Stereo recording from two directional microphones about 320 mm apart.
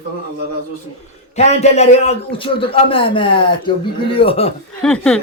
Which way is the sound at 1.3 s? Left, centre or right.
Left.